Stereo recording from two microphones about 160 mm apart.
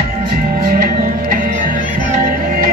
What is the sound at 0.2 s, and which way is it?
Music, 65° right (ahead or behind).